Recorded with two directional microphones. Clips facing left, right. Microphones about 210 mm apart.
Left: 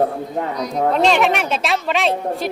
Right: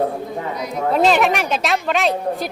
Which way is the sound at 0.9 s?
Centre (ahead or behind).